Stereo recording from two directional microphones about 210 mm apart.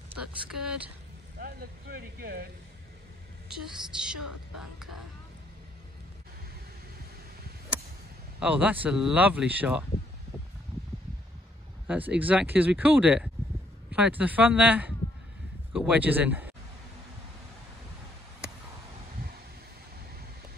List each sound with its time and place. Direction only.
0.2 s speech: 5° right (ahead or behind)
1.4 s speech: 45° right (ahead or behind)
3.4 s a woman's voice: 5° right (ahead or behind)
8.4 s speech: 5° right (ahead or behind)
11.9 s speech: 5° right (ahead or behind)